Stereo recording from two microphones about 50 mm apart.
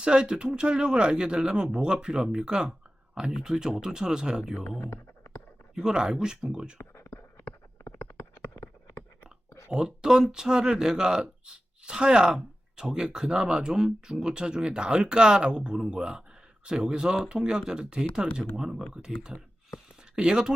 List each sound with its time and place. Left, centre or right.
0.0 s speech: centre
5.7 s speech: centre
6.7 s a sound: left
9.7 s speech: centre